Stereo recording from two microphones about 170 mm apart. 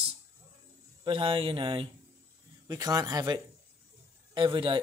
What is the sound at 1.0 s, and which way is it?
Speech, 30° right (ahead or behind).